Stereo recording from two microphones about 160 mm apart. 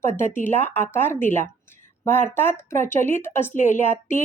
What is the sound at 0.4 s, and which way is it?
Speech, 10° left (ahead or behind).